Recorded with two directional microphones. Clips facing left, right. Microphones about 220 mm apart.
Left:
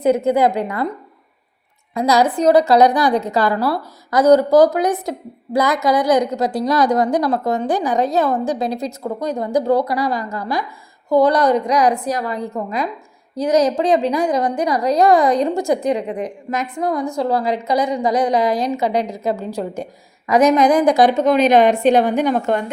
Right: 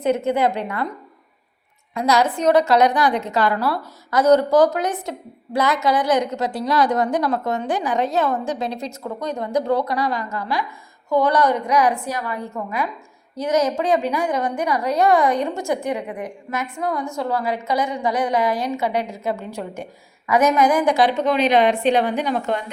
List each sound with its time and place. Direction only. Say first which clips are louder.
0.3 s a woman's voice: left 4 dB; 35° left (ahead or behind)
1.9 s a woman's voice: left 3 dB; 35° left (ahead or behind)